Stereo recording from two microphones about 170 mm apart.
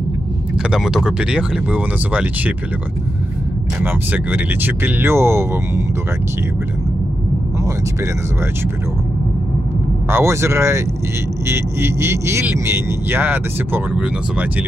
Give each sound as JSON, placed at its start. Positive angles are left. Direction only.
{"t": 0.6, "sound": "speech", "side_deg": -5}
{"t": 3.8, "sound": "speech", "side_deg": -10}
{"t": 10.0, "sound": "speech", "side_deg": -15}